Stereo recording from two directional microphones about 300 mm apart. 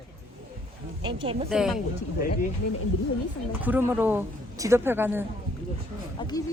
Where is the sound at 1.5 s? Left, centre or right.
Centre.